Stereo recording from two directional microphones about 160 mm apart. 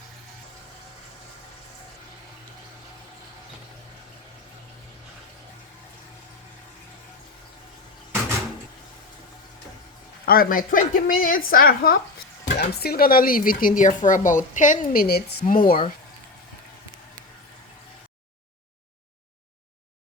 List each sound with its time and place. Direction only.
10.2 s speech: 65° left (ahead or behind)
12.5 s speech: 85° left
15.4 s speech: 60° left (ahead or behind)